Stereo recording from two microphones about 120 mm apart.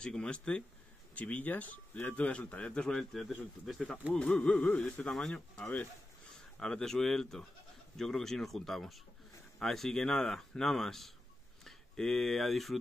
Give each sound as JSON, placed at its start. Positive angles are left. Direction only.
{"t": 0.0, "sound": "speech", "side_deg": 5}